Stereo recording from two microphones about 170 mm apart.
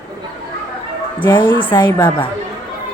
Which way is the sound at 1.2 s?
30° left (ahead or behind).